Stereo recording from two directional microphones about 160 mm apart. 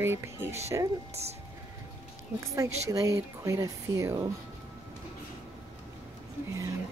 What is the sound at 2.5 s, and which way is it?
Speech, 20° right (ahead or behind).